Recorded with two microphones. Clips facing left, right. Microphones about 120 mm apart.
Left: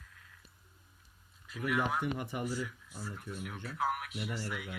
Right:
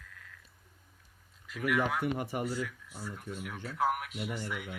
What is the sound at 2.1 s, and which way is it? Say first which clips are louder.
Speech: right 3 dB; 50° right (ahead or behind).